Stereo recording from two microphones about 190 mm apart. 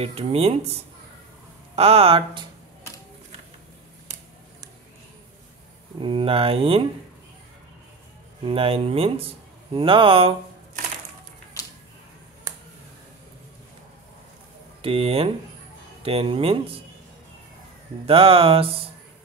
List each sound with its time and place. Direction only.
0.0 s speech: 30° right (ahead or behind)
1.8 s speech: 30° right (ahead or behind)
5.9 s speech: 30° right (ahead or behind)
8.5 s speech: 30° right (ahead or behind)
14.8 s speech: 30° right (ahead or behind)
18.0 s speech: 30° right (ahead or behind)